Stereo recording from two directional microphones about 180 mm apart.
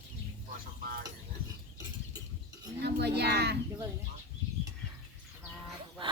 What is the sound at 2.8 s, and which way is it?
Speech, 65° right (ahead or behind).